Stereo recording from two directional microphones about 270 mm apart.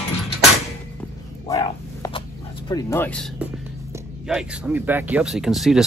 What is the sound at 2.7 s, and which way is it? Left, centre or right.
Speech, centre.